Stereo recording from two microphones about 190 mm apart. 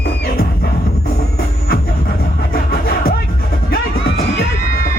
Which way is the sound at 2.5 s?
55° left (ahead or behind).